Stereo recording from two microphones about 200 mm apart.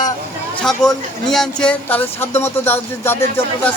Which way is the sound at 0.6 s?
Centre (ahead or behind).